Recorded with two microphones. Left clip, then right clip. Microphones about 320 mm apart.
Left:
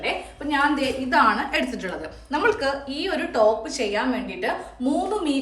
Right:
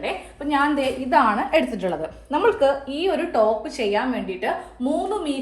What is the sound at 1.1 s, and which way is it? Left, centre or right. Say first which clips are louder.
Speech: right 2 dB; centre.